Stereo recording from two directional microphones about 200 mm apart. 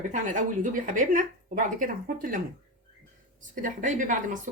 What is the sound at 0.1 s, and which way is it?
Speech, 40° right (ahead or behind).